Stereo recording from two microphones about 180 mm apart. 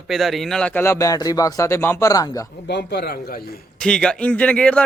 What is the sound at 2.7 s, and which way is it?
Speech, 65° left (ahead or behind).